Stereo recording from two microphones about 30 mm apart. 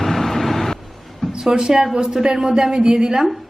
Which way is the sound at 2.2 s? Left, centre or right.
Right.